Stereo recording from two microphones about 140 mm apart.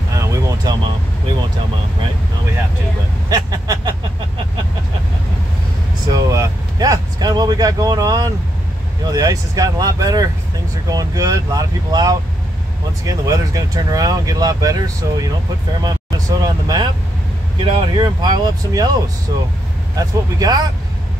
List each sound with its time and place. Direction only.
0.1 s vehicle: 25° right (ahead or behind)
3.3 s speech: 30° right (ahead or behind)
6.1 s speech: 25° right (ahead or behind)
15.8 s speech: 30° right (ahead or behind)